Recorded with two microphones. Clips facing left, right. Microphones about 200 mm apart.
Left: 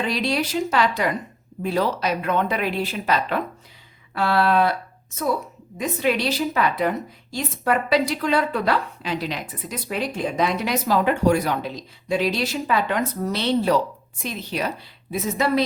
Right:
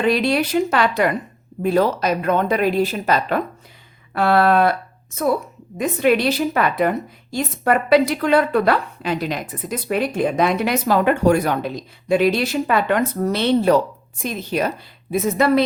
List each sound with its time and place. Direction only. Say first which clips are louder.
0.0 s a woman's voice: right 6 dB; 55° right (ahead or behind)
5.7 s a woman's voice: right 5 dB; 55° right (ahead or behind)